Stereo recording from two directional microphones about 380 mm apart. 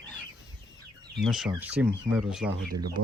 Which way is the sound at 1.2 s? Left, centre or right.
Centre.